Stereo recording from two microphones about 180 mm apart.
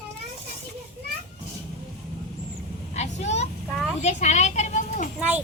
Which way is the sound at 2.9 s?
40° left (ahead or behind).